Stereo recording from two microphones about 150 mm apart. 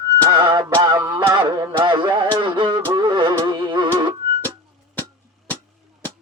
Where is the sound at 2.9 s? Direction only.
30° right (ahead or behind).